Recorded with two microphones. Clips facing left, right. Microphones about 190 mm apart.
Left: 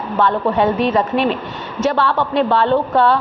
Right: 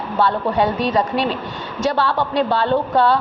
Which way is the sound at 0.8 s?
40° right (ahead or behind).